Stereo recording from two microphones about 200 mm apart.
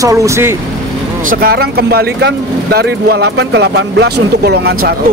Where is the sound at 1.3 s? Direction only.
50° right (ahead or behind).